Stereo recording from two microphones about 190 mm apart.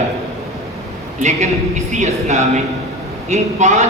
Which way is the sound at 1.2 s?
40° right (ahead or behind).